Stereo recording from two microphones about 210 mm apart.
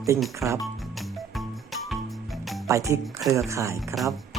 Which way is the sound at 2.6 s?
15° right (ahead or behind).